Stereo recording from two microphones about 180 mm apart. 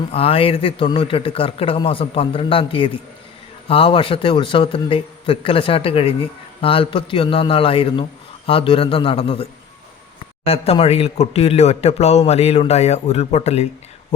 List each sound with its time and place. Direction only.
0.1 s a man's voice: 30° left (ahead or behind)